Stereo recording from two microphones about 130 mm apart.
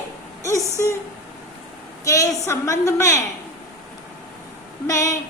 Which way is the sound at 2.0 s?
25° left (ahead or behind).